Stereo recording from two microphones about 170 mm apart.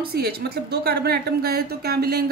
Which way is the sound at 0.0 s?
65° right (ahead or behind).